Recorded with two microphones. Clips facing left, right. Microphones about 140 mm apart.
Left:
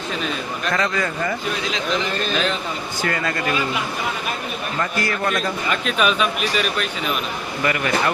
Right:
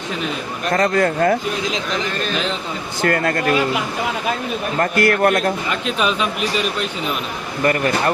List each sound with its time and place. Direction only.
0.7 s speech: 50° right (ahead or behind)
3.0 s speech: 55° right (ahead or behind)
4.8 s a man's voice: 60° right (ahead or behind)
5.8 s speech: 25° right (ahead or behind)
7.6 s a man's voice: 40° right (ahead or behind)